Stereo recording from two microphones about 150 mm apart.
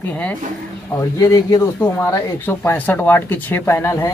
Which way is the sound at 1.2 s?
25° left (ahead or behind).